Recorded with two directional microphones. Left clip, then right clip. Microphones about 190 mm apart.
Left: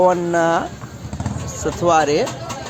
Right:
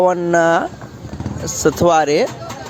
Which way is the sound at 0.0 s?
35° right (ahead or behind).